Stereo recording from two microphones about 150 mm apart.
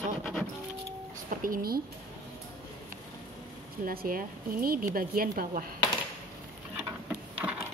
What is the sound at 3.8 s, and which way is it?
Speech, 75° right (ahead or behind).